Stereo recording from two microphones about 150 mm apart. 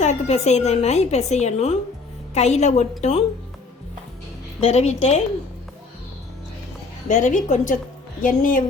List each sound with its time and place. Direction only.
0.0 s a woman's voice: 50° left (ahead or behind)
4.6 s a woman's voice: 45° left (ahead or behind)
7.1 s a woman's voice: 55° left (ahead or behind)